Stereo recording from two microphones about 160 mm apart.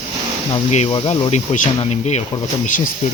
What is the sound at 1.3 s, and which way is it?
Speech, 45° left (ahead or behind).